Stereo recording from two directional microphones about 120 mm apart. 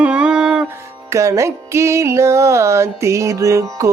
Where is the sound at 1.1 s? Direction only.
25° right (ahead or behind).